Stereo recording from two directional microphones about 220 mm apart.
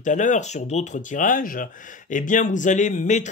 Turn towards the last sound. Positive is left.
turn(degrees=35)  # may be behind; listen again after turning